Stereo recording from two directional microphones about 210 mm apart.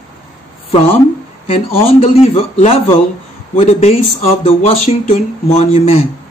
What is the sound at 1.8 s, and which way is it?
Speech, 30° left (ahead or behind).